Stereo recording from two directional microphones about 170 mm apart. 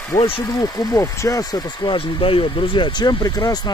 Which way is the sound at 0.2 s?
25° left (ahead or behind).